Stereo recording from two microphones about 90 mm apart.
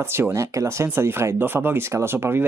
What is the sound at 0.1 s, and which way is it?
Speech, 30° right (ahead or behind).